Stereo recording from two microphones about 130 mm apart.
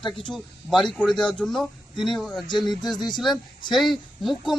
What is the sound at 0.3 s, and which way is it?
A man's voice, centre (ahead or behind).